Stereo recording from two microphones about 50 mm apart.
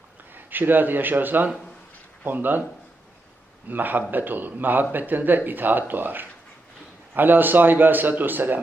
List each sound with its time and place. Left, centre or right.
0.3 s a man's voice: right
3.7 s a man's voice: right